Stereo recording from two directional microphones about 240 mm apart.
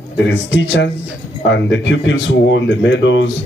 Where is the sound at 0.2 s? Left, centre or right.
Left.